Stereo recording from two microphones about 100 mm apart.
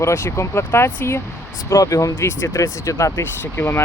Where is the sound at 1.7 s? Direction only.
35° left (ahead or behind).